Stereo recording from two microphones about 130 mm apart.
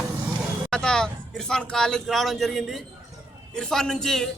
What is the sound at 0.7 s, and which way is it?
A man's voice, 5° left (ahead or behind).